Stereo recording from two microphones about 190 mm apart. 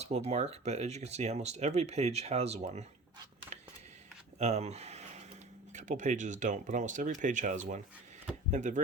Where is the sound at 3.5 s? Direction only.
35° right (ahead or behind).